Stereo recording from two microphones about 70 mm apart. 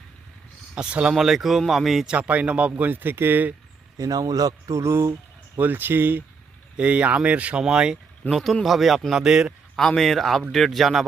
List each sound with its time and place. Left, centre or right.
0.8 s speech: centre
2.1 s speech: centre
3.9 s speech: right
4.8 s speech: right
5.5 s speech: right
6.7 s speech: centre
8.3 s speech: centre
9.7 s speech: centre